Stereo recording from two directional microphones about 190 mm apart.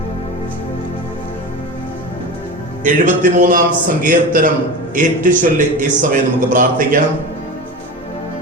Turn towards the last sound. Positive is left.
turn(degrees=-45)  # may be behind; listen again after turning